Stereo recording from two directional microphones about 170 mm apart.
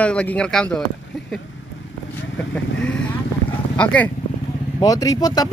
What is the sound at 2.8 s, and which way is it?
Speech, 5° left (ahead or behind).